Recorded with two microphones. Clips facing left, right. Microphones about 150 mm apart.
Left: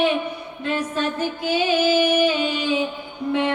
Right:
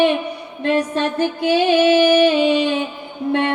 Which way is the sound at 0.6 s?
70° right (ahead or behind).